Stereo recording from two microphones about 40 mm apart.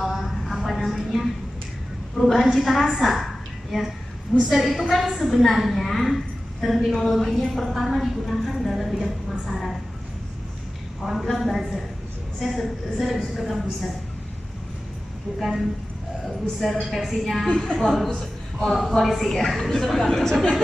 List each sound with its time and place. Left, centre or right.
0.0 s a sound: centre
2.1 s a woman's voice: centre
11.1 s a woman's voice: centre
15.3 s a woman's voice: centre
16.8 s a woman's voice: centre